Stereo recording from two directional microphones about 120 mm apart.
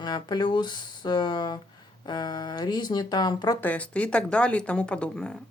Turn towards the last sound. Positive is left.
turn(degrees=5)  # may be behind; listen again after turning